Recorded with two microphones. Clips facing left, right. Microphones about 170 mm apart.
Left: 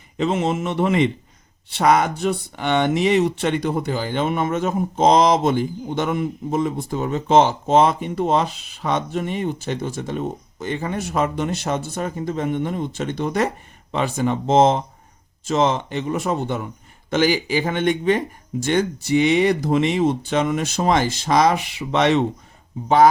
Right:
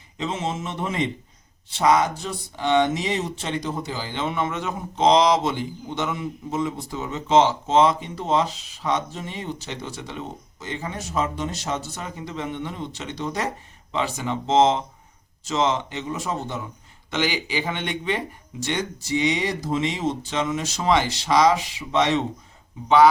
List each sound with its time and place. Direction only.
0.2 s speech: 60° left (ahead or behind)
17.1 s speech: 45° left (ahead or behind); by 22.2 s 65° left (ahead or behind)